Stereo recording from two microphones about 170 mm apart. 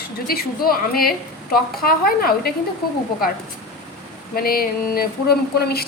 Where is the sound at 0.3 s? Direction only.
60° left (ahead or behind).